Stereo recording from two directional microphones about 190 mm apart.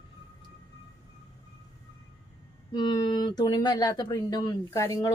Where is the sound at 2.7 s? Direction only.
25° left (ahead or behind).